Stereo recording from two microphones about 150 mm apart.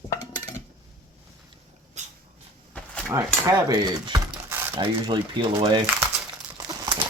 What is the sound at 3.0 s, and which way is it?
Speech, 15° right (ahead or behind).